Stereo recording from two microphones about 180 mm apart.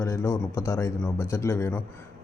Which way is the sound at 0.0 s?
15° left (ahead or behind).